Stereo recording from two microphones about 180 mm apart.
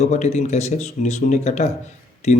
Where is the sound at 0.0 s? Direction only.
40° left (ahead or behind).